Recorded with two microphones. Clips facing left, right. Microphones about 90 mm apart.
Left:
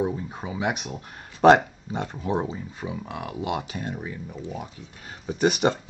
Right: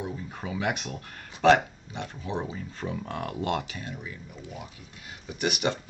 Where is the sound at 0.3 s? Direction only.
20° left (ahead or behind).